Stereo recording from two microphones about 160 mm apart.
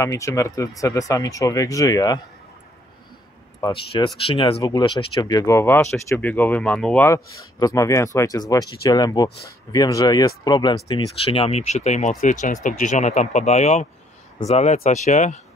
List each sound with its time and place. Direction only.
0.0 s speech: 20° left (ahead or behind)
3.6 s speech: 35° left (ahead or behind); by 7.2 s 10° left (ahead or behind)
7.5 s speech: 20° left (ahead or behind); by 15.4 s 50° left (ahead or behind)